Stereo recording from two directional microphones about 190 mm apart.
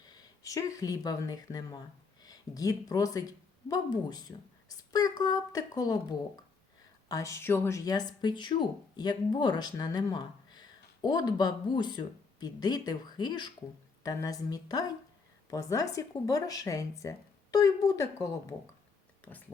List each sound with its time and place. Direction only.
0.0 s speech: 20° left (ahead or behind)